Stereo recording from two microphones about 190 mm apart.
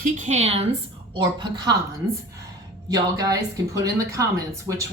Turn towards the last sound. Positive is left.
turn(degrees=-15)  # may be behind; listen again after turning